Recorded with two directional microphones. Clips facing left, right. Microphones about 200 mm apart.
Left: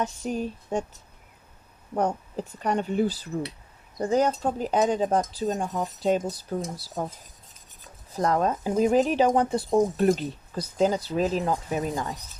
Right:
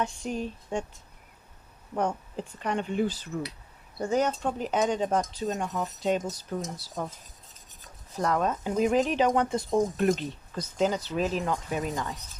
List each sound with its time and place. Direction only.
0.0 s speech: 40° left (ahead or behind)
2.0 s speech: 40° left (ahead or behind)
8.2 s speech: 35° left (ahead or behind)